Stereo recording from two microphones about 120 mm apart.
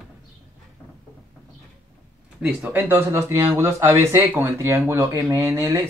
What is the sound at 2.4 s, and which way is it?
Speech, 15° right (ahead or behind).